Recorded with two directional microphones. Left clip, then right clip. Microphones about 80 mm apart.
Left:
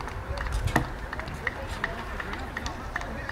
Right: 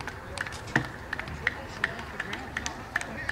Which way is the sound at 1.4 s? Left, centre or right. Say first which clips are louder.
Right 2 dB; right.